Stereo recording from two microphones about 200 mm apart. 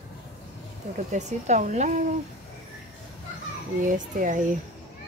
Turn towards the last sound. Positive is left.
turn(degrees=-40)  # may be behind; listen again after turning